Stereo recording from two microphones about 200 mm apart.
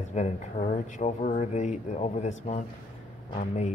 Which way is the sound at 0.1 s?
35° left (ahead or behind).